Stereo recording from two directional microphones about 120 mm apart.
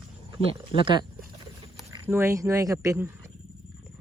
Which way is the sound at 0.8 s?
40° right (ahead or behind).